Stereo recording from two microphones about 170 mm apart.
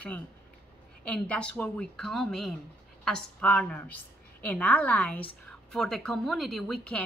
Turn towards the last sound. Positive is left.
turn(degrees=5)  # may be behind; listen again after turning